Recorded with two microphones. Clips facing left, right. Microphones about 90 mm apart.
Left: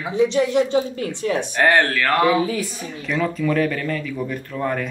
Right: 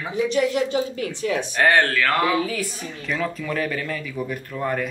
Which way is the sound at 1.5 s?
Centre (ahead or behind).